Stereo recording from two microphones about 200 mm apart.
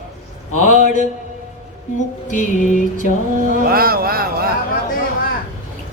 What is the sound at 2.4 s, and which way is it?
Music, 40° left (ahead or behind).